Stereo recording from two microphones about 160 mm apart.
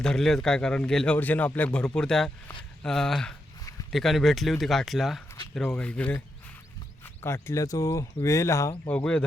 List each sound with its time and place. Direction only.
0.0 s a man's voice: 5° left (ahead or behind); by 8.7 s 20° left (ahead or behind)
8.9 s speech: 5° left (ahead or behind)